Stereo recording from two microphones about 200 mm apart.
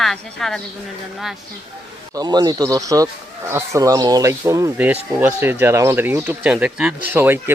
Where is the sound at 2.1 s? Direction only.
20° right (ahead or behind).